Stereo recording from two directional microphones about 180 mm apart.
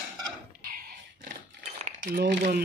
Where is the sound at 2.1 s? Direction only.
60° right (ahead or behind).